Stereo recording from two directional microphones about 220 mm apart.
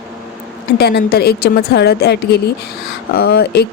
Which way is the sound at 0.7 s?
45° left (ahead or behind).